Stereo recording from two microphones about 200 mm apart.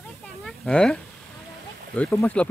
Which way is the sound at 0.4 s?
5° left (ahead or behind).